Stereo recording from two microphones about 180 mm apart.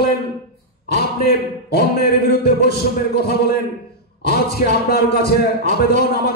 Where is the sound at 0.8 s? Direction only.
60° left (ahead or behind).